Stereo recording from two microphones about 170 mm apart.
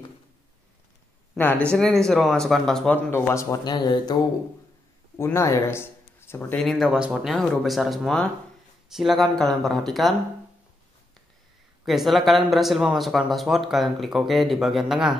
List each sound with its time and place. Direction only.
1.3 s speech: 10° left (ahead or behind)
3.1 s speech: 15° left (ahead or behind)
6.6 s speech: centre (ahead or behind)
11.8 s speech: centre (ahead or behind)